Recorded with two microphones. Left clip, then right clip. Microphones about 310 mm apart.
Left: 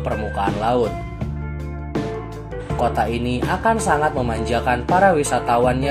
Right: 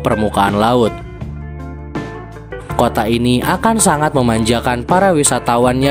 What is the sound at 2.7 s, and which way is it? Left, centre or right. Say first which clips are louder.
Speech: right 5 dB; right.